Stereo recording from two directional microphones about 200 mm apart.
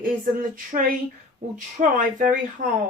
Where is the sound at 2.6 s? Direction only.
40° right (ahead or behind).